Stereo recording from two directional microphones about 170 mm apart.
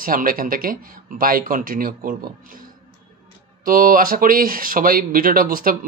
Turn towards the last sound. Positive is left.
turn(degrees=-55)  # may be behind; listen again after turning